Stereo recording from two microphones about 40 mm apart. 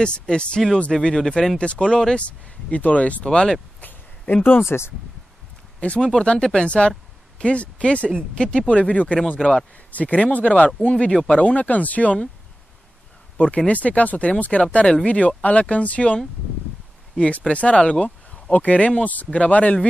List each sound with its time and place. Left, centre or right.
0.0 s speech: left
0.9 s speech: centre
1.6 s speech: left
2.1 s speech: left
3.3 s speech: centre
3.8 s a sound: left
4.4 s speech: left
4.6 s speech: left
5.8 s speech: left
6.1 s speech: left
9.4 s speech: centre
9.8 s speech: left
13.7 s speech: left
17.5 s speech: left